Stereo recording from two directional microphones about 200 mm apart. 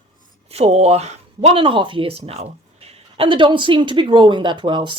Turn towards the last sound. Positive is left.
turn(degrees=-25)  # may be behind; listen again after turning